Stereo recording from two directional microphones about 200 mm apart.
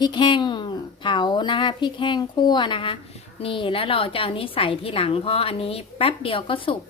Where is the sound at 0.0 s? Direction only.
25° left (ahead or behind).